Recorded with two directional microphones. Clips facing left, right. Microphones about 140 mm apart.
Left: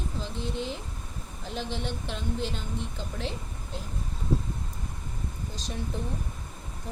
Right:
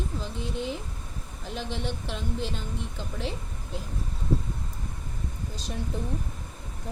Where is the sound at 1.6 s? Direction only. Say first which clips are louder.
Even; centre (ahead or behind).